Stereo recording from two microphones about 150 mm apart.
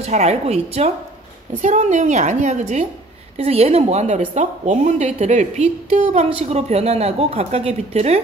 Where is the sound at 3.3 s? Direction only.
40° right (ahead or behind).